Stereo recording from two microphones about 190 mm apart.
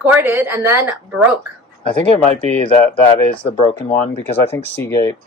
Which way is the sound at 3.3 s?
25° left (ahead or behind).